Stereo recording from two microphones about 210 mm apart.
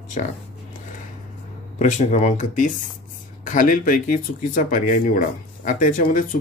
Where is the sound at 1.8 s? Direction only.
35° left (ahead or behind).